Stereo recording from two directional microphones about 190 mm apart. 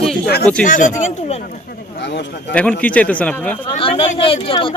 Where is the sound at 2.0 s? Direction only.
65° left (ahead or behind).